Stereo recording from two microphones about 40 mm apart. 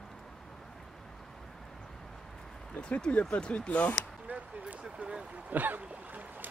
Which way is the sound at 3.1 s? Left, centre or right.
Left.